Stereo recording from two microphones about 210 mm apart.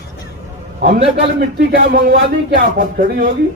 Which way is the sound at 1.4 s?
45° right (ahead or behind).